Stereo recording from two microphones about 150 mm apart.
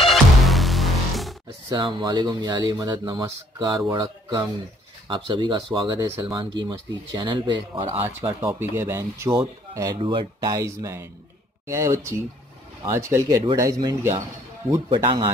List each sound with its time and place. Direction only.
0.1 s music: centre (ahead or behind)
1.7 s speech: 30° right (ahead or behind)
8.4 s speech: 15° right (ahead or behind)
9.9 s speech: 30° right (ahead or behind)
14.9 s speech: 35° right (ahead or behind)